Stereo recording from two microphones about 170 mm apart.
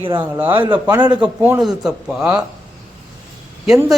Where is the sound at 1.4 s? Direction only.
5° right (ahead or behind).